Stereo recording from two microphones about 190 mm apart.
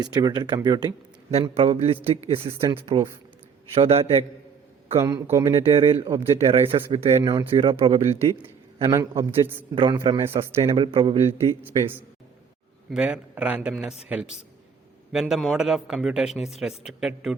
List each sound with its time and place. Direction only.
0.0 s speech: 20° right (ahead or behind)
1.3 s a man's voice: 35° right (ahead or behind)
5.0 s a man's voice: 20° right (ahead or behind)
5.5 s speech: 30° right (ahead or behind)
8.9 s a man's voice: 15° right (ahead or behind)
9.7 s speech: 25° right (ahead or behind)
11.3 s a man's voice: 15° right (ahead or behind)